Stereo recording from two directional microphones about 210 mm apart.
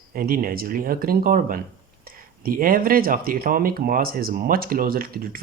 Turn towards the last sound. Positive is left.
turn(degrees=-45)  # may be behind; listen again after turning